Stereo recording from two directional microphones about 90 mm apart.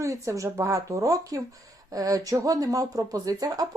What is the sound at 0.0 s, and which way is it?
Speech, 35° right (ahead or behind).